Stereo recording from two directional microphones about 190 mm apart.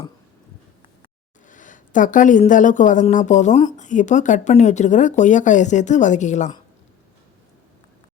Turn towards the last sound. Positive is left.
turn(degrees=40)  # may be behind; listen again after turning